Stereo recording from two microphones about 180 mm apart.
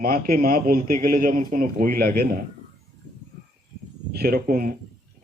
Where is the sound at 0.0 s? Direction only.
55° right (ahead or behind).